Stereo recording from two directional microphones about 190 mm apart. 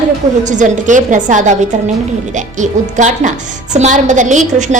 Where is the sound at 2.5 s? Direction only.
40° right (ahead or behind).